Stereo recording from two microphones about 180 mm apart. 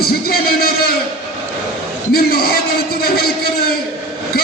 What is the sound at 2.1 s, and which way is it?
Speech, 55° left (ahead or behind).